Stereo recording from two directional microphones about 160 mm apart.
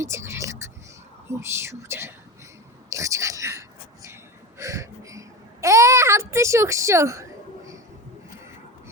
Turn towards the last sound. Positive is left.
turn(degrees=-20)  # may be behind; listen again after turning